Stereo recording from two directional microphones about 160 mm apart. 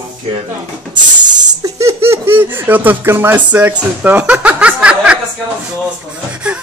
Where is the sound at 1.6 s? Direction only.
15° right (ahead or behind).